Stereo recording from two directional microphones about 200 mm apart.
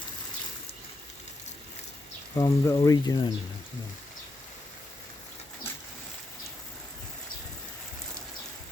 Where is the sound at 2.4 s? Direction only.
15° left (ahead or behind).